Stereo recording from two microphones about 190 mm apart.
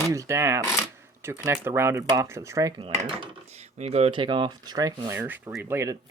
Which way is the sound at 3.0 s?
35° right (ahead or behind).